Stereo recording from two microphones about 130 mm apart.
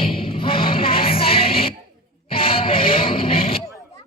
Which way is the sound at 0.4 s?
45° left (ahead or behind).